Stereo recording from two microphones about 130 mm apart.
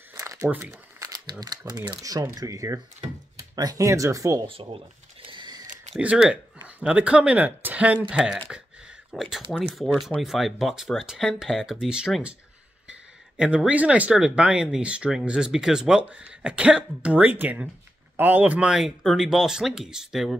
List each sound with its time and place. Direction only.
0.4 s speech: 15° right (ahead or behind)
0.9 s crumpling: 30° right (ahead or behind)
1.4 s speech: 30° right (ahead or behind)
4.5 s cash register: 45° right (ahead or behind)
5.9 s speech: 5° right (ahead or behind)
13.4 s speech: 5° right (ahead or behind)